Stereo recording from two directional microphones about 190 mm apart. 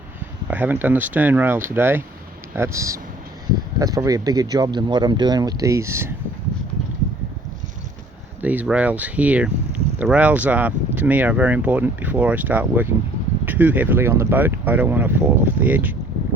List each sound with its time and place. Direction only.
0.4 s speech: 10° right (ahead or behind)
8.4 s speech: 10° right (ahead or behind)